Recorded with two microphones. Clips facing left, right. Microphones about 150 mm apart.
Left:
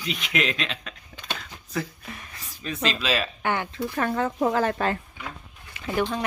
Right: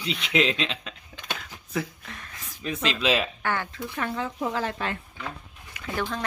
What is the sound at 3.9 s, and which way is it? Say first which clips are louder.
Speech: left 5 dB; 45° left (ahead or behind).